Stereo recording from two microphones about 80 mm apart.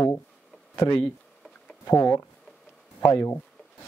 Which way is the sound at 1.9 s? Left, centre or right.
Left.